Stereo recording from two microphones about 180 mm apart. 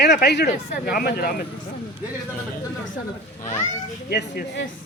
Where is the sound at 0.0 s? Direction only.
70° left (ahead or behind).